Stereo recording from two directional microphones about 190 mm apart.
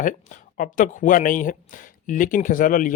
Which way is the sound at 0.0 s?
45° left (ahead or behind).